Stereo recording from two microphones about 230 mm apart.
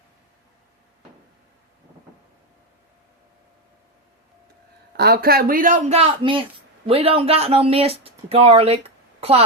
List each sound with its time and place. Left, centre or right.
4.9 s speech: right